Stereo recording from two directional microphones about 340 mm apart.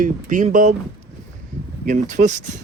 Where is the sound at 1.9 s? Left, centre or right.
Right.